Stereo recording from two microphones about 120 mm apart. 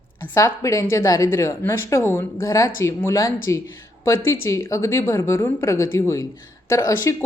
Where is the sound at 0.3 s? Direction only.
25° left (ahead or behind).